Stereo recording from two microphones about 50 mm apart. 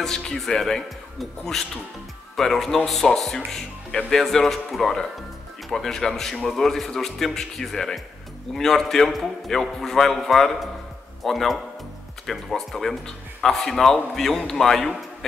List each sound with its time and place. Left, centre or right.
0.0 s a man's voice: centre